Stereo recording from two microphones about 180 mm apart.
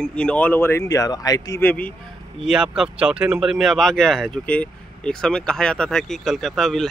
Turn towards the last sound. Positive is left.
turn(degrees=0)  # may be behind; listen again after turning